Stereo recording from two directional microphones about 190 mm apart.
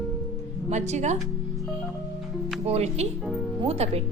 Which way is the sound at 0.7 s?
35° right (ahead or behind).